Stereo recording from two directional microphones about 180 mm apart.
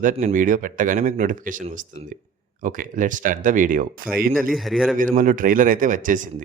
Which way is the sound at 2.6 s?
45° right (ahead or behind).